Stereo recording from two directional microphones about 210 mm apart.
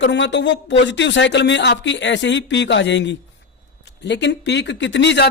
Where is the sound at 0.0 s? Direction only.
60° left (ahead or behind).